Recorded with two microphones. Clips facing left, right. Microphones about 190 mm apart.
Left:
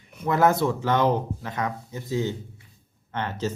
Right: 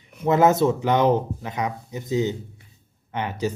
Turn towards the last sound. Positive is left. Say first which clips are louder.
# right 2 dB
turn(degrees=-15)  # may be behind; listen again after turning